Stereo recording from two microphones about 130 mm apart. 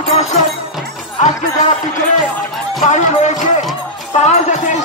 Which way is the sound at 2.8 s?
70° left (ahead or behind).